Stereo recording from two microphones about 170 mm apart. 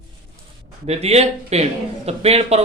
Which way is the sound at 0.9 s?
40° right (ahead or behind).